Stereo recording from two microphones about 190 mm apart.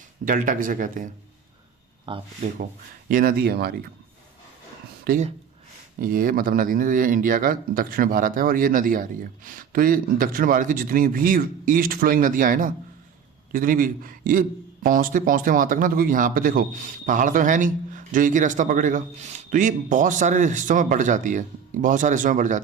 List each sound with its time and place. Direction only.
0.3 s speech: 45° right (ahead or behind)
2.1 s speech: 25° right (ahead or behind)
3.1 s speech: 50° right (ahead or behind)
5.0 s speech: 45° right (ahead or behind)